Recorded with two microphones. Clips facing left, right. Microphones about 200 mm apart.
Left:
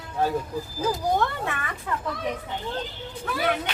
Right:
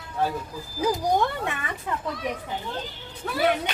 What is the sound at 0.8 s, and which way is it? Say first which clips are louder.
Speech: right 2 dB; 15° right (ahead or behind).